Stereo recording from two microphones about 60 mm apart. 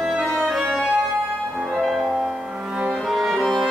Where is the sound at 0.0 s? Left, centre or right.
Centre.